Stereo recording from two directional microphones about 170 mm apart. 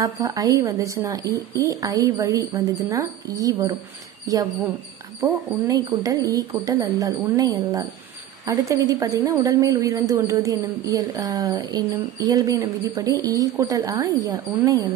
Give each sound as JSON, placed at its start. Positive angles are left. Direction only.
{"t": 0.0, "sound": "a woman's voice", "side_deg": -20}
{"t": 5.2, "sound": "a woman's voice", "side_deg": -20}